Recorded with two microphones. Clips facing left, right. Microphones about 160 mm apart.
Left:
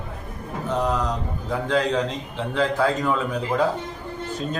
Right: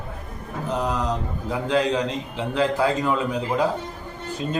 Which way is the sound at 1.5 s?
10° right (ahead or behind).